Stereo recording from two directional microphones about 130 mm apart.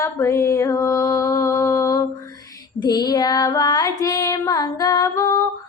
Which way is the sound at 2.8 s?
30° left (ahead or behind).